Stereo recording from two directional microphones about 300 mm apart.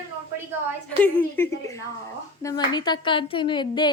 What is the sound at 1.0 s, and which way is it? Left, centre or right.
A woman's voice, centre.